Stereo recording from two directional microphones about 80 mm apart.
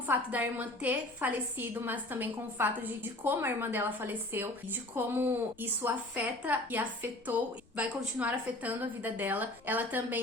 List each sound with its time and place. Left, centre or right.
0.3 s a woman's voice: centre